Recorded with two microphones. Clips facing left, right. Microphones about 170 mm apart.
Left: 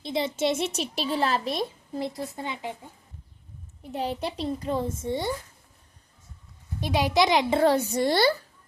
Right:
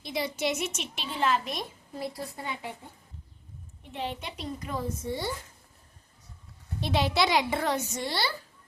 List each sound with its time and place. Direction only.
0.0 s a child's voice: 25° left (ahead or behind)
3.8 s a woman's voice: 40° left (ahead or behind); by 5.3 s 20° left (ahead or behind)
6.7 s a child's voice: 15° left (ahead or behind); by 8.0 s 30° left (ahead or behind)
8.0 s speech: 45° left (ahead or behind)